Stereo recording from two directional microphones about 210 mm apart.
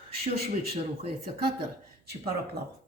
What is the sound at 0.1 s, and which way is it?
Speech, 45° right (ahead or behind).